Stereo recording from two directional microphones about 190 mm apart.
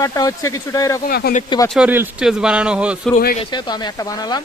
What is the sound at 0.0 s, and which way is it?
Speech, 20° left (ahead or behind).